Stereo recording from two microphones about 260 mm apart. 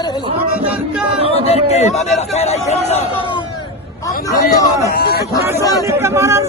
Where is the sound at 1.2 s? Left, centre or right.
Left.